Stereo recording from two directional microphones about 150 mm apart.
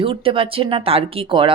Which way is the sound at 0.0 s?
35° right (ahead or behind).